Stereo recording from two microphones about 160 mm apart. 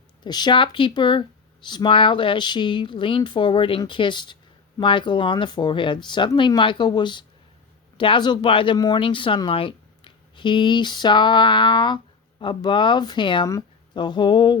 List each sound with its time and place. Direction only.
0.3 s speech: 25° left (ahead or behind)